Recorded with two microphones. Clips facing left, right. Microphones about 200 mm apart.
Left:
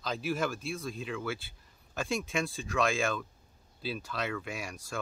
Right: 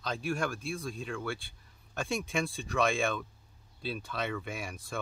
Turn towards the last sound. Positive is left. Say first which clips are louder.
# even
turn(degrees=0)  # may be behind; listen again after turning